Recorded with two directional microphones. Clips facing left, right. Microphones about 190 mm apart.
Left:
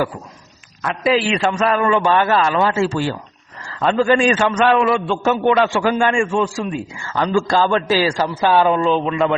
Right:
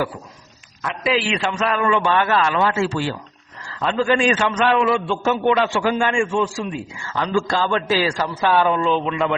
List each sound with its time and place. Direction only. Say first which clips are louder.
1.0 s a man's voice: left 4 dB; 40° left (ahead or behind)
7.1 s a man's voice: left 3 dB; 45° left (ahead or behind)